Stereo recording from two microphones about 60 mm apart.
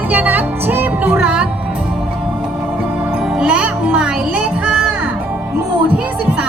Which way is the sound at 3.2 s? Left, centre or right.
Centre.